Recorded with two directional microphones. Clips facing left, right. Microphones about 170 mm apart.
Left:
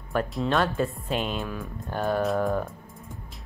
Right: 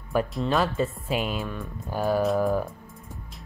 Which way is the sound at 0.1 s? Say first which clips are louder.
Right 1 dB; centre (ahead or behind).